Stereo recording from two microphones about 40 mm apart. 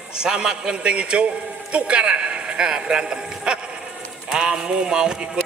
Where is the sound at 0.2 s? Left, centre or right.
Centre.